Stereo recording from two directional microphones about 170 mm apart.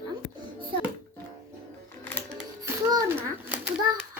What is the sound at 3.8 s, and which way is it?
Speech, 20° right (ahead or behind).